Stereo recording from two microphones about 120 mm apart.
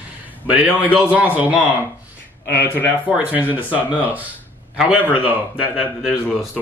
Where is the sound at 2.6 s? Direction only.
15° left (ahead or behind).